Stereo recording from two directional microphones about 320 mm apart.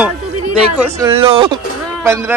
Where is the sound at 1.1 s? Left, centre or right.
Centre.